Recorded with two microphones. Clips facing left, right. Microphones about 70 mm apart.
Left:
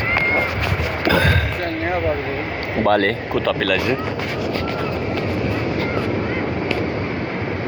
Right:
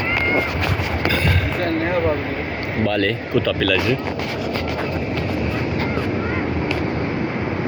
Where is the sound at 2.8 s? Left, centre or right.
Left.